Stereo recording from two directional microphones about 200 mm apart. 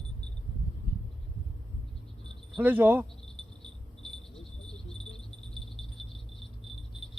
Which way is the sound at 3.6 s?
5° left (ahead or behind).